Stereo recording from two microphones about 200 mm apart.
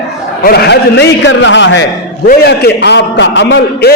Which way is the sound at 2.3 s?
55° left (ahead or behind).